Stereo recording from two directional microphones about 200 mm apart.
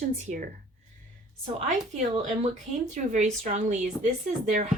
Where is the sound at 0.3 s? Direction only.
35° right (ahead or behind).